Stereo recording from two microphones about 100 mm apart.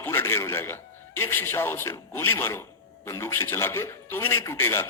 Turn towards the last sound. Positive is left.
turn(degrees=25)  # may be behind; listen again after turning